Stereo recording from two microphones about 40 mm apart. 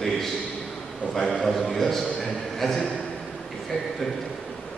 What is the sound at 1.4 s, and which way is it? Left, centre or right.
A man's voice, centre.